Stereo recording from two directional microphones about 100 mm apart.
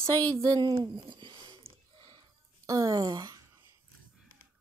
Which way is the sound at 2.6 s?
35° right (ahead or behind).